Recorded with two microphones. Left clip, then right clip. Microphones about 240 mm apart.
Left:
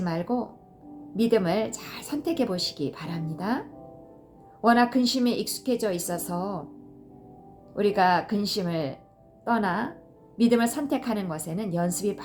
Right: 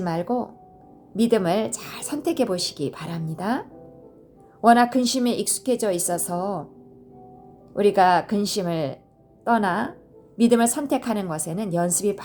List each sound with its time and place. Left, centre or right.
0.0 s a woman's voice: right
4.6 s a woman's voice: right
7.8 s a woman's voice: right